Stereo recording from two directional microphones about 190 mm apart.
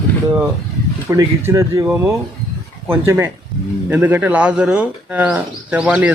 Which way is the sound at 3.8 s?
10° right (ahead or behind).